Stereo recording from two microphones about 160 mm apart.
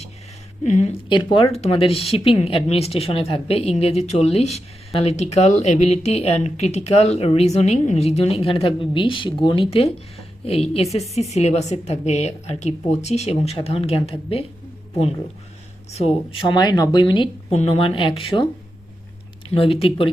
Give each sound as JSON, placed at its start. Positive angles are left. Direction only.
{"t": 0.6, "sound": "a woman's voice", "side_deg": 45}
{"t": 1.1, "sound": "a woman's voice", "side_deg": 30}
{"t": 16.0, "sound": "speech", "side_deg": 35}
{"t": 17.5, "sound": "speech", "side_deg": 40}
{"t": 19.5, "sound": "speech", "side_deg": 35}